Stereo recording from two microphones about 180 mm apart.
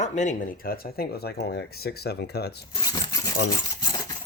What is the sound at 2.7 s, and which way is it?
Sewing machine, 25° left (ahead or behind).